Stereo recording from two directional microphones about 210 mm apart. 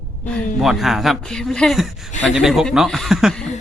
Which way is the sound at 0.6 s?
Centre (ahead or behind).